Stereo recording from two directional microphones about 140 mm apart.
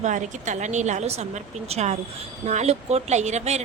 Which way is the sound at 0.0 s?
60° right (ahead or behind).